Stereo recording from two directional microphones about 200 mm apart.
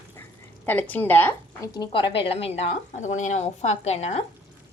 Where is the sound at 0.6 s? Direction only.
10° left (ahead or behind).